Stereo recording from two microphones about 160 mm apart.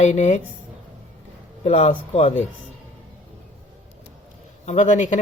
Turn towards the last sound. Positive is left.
turn(degrees=50)  # may be behind; listen again after turning